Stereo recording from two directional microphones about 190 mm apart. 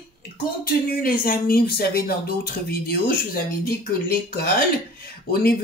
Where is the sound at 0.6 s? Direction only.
50° left (ahead or behind).